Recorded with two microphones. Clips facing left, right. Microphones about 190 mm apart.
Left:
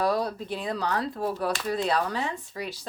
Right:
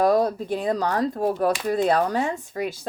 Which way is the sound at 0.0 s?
45° right (ahead or behind).